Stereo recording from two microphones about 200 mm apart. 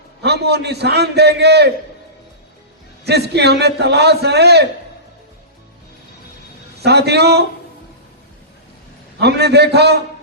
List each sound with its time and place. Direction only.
0.2 s a man's voice: 55° right (ahead or behind)
3.1 s a man's voice: 55° right (ahead or behind)
6.8 s a man's voice: 55° right (ahead or behind)
9.2 s a man's voice: 55° right (ahead or behind)